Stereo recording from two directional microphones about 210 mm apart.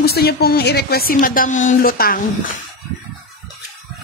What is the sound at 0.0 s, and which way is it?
Speech, 50° left (ahead or behind).